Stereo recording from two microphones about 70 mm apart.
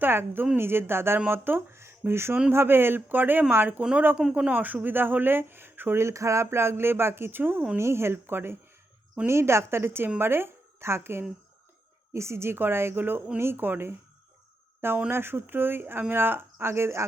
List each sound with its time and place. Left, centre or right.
0.0 s speech: right
15.1 s speech: right